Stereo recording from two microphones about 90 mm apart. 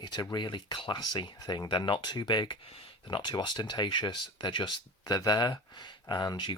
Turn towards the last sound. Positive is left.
turn(degrees=50)  # may be behind; listen again after turning